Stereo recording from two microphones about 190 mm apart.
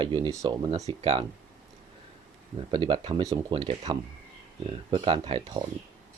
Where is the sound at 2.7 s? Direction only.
25° right (ahead or behind).